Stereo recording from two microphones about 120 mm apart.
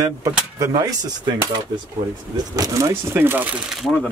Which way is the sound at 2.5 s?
30° right (ahead or behind).